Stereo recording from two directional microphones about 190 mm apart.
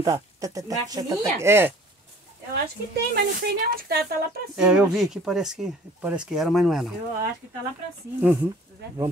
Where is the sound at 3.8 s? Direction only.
55° right (ahead or behind).